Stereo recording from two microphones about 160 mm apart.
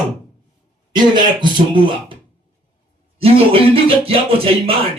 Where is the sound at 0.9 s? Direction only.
30° right (ahead or behind).